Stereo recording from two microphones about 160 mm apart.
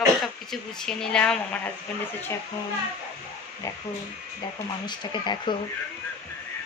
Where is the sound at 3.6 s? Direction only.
20° left (ahead or behind).